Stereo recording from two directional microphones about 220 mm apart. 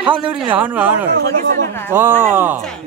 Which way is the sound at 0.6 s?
5° right (ahead or behind).